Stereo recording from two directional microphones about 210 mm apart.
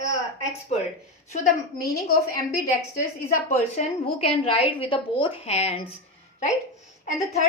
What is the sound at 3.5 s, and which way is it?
A woman's voice, 30° left (ahead or behind).